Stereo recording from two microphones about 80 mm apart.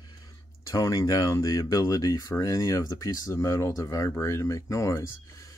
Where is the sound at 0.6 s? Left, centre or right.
Left.